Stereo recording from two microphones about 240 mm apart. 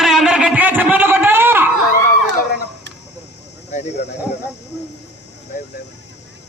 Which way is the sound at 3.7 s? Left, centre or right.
Left.